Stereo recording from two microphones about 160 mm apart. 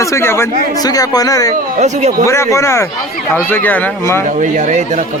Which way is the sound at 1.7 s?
45° right (ahead or behind).